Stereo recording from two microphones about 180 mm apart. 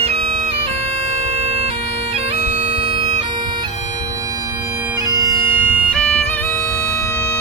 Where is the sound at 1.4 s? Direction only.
30° right (ahead or behind).